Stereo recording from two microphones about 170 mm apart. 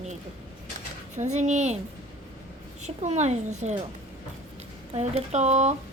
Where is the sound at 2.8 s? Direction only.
40° right (ahead or behind).